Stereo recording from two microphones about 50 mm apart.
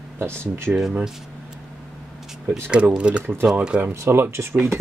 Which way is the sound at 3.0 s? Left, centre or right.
Right.